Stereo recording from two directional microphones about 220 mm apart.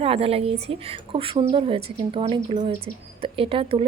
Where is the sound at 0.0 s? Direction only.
25° right (ahead or behind).